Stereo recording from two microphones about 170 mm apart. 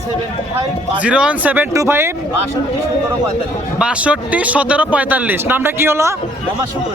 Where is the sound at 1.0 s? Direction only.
5° right (ahead or behind).